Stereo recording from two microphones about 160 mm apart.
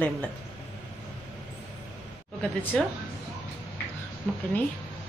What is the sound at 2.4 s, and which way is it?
Speech, 10° left (ahead or behind).